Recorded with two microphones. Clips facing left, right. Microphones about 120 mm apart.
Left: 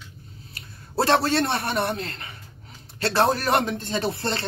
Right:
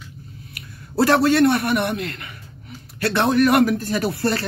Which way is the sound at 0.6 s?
25° left (ahead or behind).